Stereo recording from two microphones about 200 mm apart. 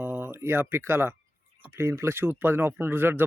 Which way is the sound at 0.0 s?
10° right (ahead or behind).